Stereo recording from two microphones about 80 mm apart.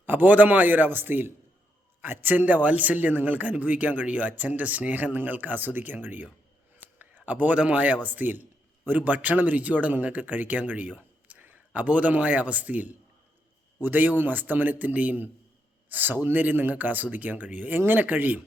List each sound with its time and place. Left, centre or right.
0.0 s a man's voice: right